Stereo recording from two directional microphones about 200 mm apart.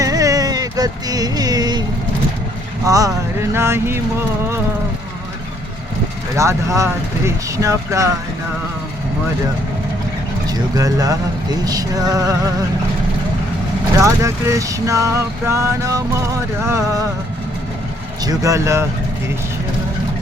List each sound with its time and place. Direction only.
0.0 s music: 15° right (ahead or behind)
2.8 s vehicle: 15° right (ahead or behind)
6.3 s vehicle: 15° right (ahead or behind)
10.4 s vehicle: 20° right (ahead or behind)
14.0 s vehicle: 15° right (ahead or behind)
18.2 s vehicle: 15° right (ahead or behind)